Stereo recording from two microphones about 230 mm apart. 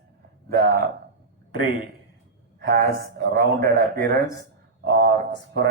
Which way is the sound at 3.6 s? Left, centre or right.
Right.